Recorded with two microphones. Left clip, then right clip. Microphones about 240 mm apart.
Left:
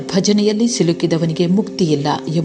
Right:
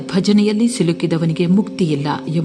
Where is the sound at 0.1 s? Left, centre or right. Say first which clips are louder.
Left 1 dB; centre.